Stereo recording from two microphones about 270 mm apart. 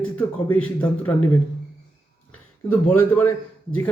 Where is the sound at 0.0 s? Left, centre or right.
Centre.